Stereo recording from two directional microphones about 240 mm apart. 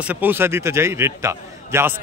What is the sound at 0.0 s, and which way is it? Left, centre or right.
A man's voice, centre.